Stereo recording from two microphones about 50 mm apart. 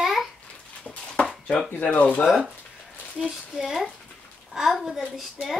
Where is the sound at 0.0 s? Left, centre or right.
Centre.